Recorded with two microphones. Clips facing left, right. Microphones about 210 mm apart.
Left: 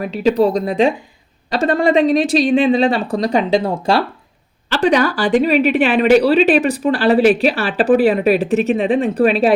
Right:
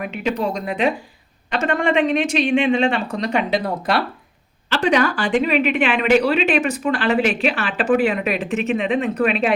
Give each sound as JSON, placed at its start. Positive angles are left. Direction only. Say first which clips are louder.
{"t": 0.0, "sound": "a woman's voice", "louder": "left 8 dB", "side_deg": 35}
{"t": 4.7, "sound": "a woman's voice", "louder": "left 3 dB", "side_deg": 40}